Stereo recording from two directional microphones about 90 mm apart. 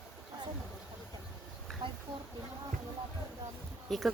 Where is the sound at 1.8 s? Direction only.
65° right (ahead or behind).